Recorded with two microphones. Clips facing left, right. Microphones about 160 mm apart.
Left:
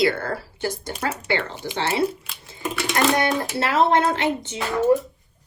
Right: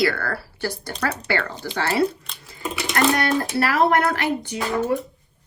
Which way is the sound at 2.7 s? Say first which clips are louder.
Left 2 dB; centre (ahead or behind).